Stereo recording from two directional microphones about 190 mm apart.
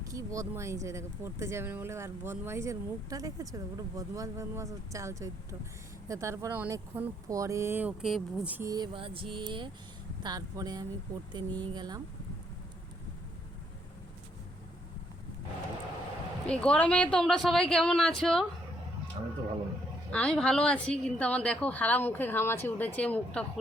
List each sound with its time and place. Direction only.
0.0 s speech: 15° right (ahead or behind)
8.7 s a sound: 25° right (ahead or behind)
16.5 s speech: 5° left (ahead or behind)
20.1 s a woman's voice: 5° left (ahead or behind)